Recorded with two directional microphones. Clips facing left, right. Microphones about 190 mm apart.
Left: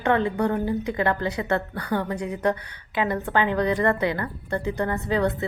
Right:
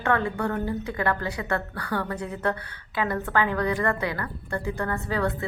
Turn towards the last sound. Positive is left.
turn(degrees=20)  # may be behind; listen again after turning